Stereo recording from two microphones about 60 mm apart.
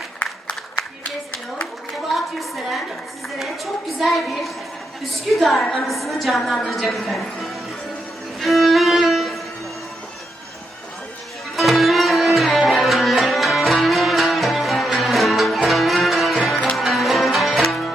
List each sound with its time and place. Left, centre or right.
0.2 s a sound: left
2.1 s a woman's voice: centre
8.4 s violin: centre
11.5 s music: centre